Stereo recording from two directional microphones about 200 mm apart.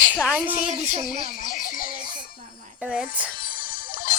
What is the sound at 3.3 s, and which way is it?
Music, 45° left (ahead or behind).